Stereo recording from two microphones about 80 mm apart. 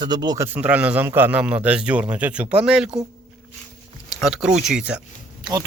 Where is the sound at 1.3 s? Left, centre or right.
Centre.